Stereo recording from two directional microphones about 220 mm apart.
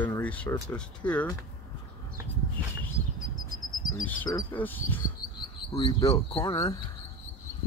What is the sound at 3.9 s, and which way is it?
Speech, 15° left (ahead or behind).